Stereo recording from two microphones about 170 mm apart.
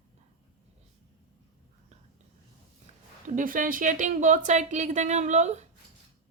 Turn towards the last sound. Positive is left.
turn(degrees=-45)  # may be behind; listen again after turning